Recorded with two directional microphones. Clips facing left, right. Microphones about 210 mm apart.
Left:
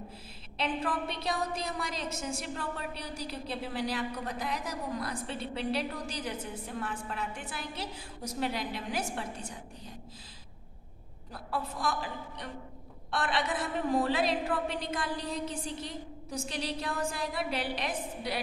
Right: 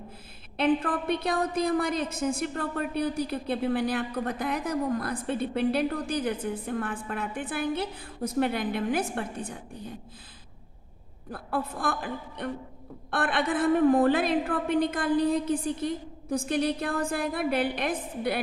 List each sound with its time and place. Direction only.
0.6 s a woman's voice: 55° right (ahead or behind)
11.3 s a woman's voice: 55° right (ahead or behind)